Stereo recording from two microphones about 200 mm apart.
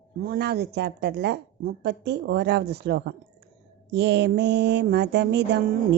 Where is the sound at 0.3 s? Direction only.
55° right (ahead or behind).